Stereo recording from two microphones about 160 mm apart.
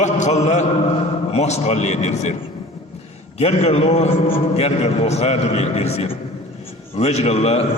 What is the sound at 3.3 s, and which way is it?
A man's voice, 40° left (ahead or behind).